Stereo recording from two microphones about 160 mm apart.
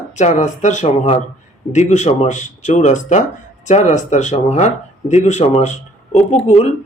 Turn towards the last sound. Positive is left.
turn(degrees=45)  # may be behind; listen again after turning